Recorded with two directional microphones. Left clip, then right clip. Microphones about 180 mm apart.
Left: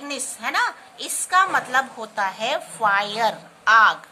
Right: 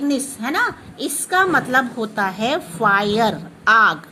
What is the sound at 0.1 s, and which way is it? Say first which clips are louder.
A woman's voice: right 3 dB; 10° right (ahead or behind).